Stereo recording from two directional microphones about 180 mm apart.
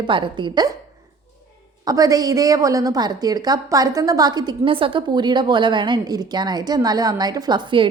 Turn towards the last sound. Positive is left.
turn(degrees=-25)  # may be behind; listen again after turning